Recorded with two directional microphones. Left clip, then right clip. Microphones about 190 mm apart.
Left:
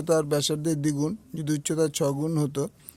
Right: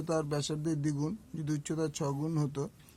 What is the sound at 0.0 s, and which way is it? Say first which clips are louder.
Speech: left 10 dB; 40° left (ahead or behind).